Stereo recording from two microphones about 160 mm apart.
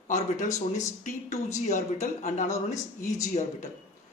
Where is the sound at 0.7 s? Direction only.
45° left (ahead or behind).